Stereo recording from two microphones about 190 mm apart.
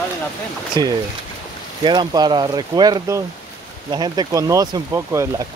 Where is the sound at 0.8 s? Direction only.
20° right (ahead or behind).